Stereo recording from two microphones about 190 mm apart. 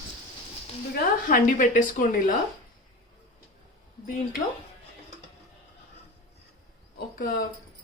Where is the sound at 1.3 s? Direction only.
45° left (ahead or behind).